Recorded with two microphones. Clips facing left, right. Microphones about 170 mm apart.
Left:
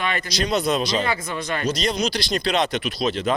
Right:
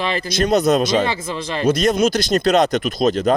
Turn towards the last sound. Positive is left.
turn(degrees=-45)  # may be behind; listen again after turning